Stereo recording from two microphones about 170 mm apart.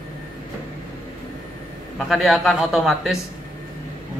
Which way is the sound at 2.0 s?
Centre (ahead or behind).